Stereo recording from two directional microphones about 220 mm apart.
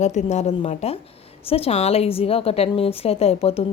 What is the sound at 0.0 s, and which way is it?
A woman's voice, 30° left (ahead or behind).